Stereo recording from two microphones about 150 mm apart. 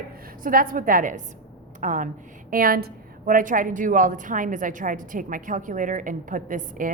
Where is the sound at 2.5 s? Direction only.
75° right (ahead or behind).